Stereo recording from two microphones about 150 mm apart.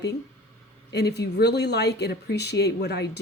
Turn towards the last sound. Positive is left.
turn(degrees=90)